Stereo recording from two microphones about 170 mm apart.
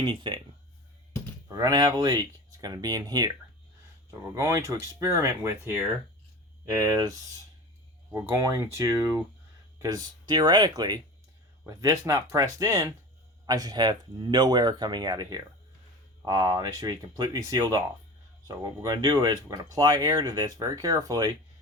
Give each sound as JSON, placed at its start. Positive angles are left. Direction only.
{"t": 0.0, "sound": "speech", "side_deg": -30}
{"t": 1.5, "sound": "speech", "side_deg": -20}